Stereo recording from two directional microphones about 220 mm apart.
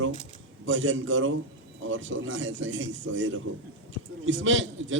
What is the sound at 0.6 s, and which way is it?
A man's voice, 60° right (ahead or behind).